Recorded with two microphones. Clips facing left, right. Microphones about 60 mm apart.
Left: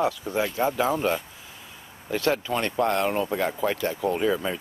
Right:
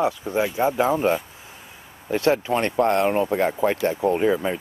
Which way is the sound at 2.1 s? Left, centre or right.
Right.